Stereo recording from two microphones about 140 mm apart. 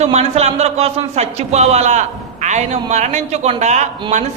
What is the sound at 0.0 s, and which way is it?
A man's voice, 50° right (ahead or behind).